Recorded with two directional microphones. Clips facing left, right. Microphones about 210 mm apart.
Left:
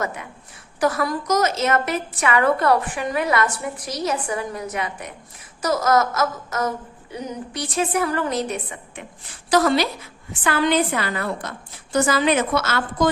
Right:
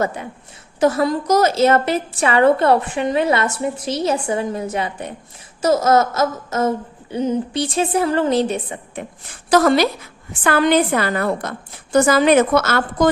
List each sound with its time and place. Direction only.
0.0 s a woman's voice: 30° right (ahead or behind)
9.5 s a woman's voice: 50° right (ahead or behind)